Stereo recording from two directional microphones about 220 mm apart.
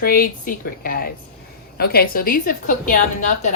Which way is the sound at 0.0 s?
40° left (ahead or behind).